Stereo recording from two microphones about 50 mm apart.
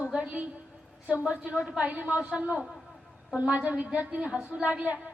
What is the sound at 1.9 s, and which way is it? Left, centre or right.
A woman's voice, right.